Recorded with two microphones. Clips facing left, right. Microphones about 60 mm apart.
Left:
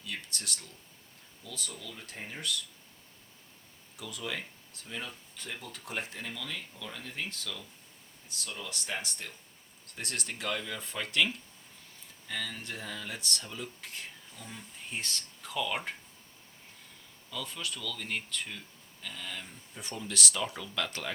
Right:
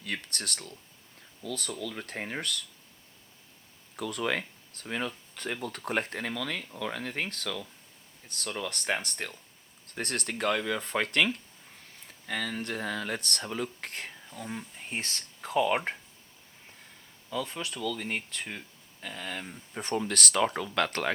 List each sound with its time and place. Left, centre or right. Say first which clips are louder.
0.0 s speech: right 5 dB; right
3.9 s speech: right 8 dB; right
14.4 s speech: right 7 dB; right
17.2 s speech: right 5 dB; right
19.7 s speech: right 8 dB; right